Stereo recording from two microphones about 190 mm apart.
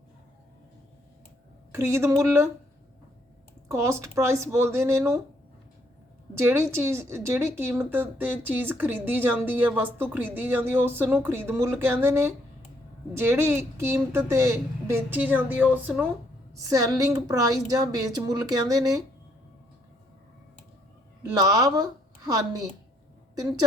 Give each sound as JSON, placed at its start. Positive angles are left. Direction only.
{"t": 1.7, "sound": "a woman's voice", "side_deg": -15}
{"t": 3.7, "sound": "a woman's voice", "side_deg": -15}
{"t": 6.3, "sound": "a woman's voice", "side_deg": -15}
{"t": 21.3, "sound": "a woman's voice", "side_deg": -20}